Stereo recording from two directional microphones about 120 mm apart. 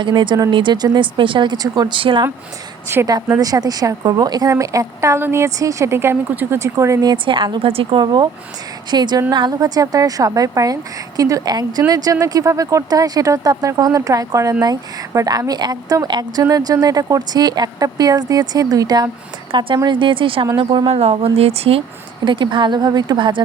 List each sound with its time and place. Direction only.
0.0 s a woman's voice: 40° right (ahead or behind)
3.2 s speech: 30° right (ahead or behind); by 8.0 s 50° right (ahead or behind)
8.0 s a woman's voice: 35° right (ahead or behind)
19.5 s a woman's voice: 45° right (ahead or behind)
20.9 s speech: 60° right (ahead or behind)
22.2 s a woman's voice: 40° right (ahead or behind)